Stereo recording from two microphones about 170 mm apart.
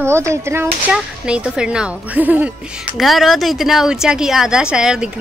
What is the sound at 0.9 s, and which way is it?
A woman's voice, 5° right (ahead or behind).